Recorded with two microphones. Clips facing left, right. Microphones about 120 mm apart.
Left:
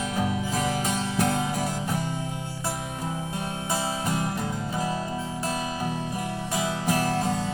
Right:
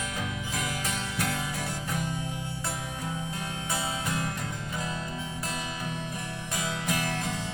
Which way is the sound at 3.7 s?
30° left (ahead or behind).